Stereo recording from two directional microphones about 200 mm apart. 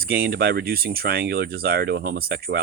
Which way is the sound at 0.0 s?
50° right (ahead or behind).